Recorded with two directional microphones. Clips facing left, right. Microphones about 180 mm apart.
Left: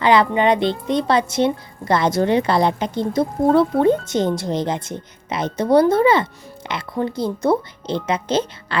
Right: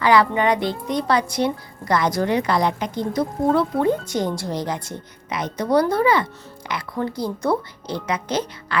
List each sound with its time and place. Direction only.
0.0 s a child's voice: 20° left (ahead or behind)